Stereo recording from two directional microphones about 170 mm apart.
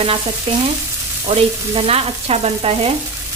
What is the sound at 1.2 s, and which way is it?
Frying, 35° right (ahead or behind).